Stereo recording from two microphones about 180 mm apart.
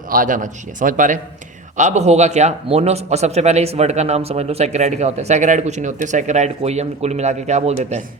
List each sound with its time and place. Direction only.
0.1 s a man's voice: 50° right (ahead or behind)